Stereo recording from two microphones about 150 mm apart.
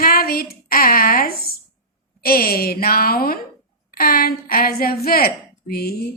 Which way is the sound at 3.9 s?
75° left (ahead or behind).